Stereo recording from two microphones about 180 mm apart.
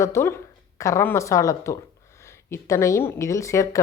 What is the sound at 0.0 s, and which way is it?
A woman's voice, 15° left (ahead or behind).